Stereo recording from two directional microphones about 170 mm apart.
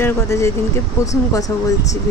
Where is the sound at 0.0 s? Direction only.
15° left (ahead or behind).